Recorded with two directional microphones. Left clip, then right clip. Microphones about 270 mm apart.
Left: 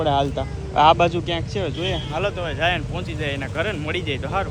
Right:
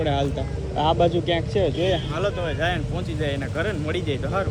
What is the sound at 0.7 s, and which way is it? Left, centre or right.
Speech, centre.